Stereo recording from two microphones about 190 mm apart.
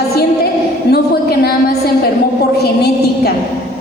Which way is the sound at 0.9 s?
55° left (ahead or behind).